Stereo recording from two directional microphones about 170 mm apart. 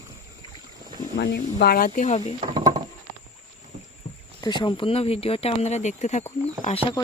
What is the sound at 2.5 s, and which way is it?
Patter, 25° right (ahead or behind).